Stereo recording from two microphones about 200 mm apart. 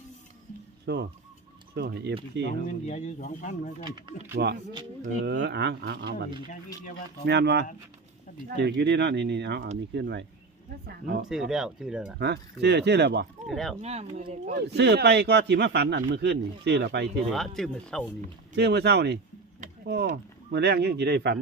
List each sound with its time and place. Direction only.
0.9 s a man's voice: 60° right (ahead or behind)
2.8 s speech: 35° left (ahead or behind)
3.8 s speech: 20° right (ahead or behind)
4.4 s a man's voice: 50° right (ahead or behind)
11.3 s speech: centre (ahead or behind)
12.2 s a man's voice: 55° right (ahead or behind)
13.5 s speech: centre (ahead or behind)
13.8 s speech: 30° right (ahead or behind)
14.7 s a man's voice: 55° right (ahead or behind)
17.3 s speech: centre (ahead or behind)
18.5 s a man's voice: 55° right (ahead or behind)